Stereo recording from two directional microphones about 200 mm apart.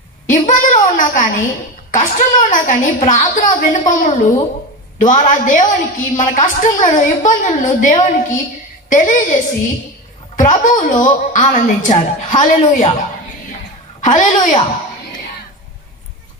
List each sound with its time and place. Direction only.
0.3 s a sound: 40° left (ahead or behind)
1.9 s a woman's voice: 40° left (ahead or behind)
14.0 s a woman's voice: 40° left (ahead or behind)